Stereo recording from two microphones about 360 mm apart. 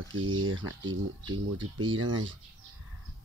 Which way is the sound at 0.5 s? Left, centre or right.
Right.